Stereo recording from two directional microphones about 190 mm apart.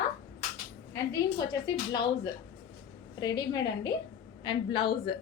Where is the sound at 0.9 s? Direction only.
20° left (ahead or behind).